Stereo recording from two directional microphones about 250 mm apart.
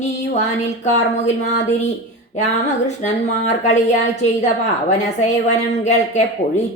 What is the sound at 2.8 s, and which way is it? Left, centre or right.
A woman's voice, left.